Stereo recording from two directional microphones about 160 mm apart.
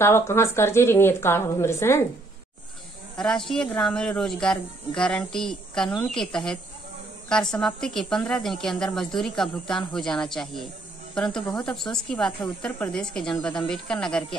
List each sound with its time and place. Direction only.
0.0 s a woman's voice: 15° left (ahead or behind)
3.2 s a woman's voice: 5° left (ahead or behind)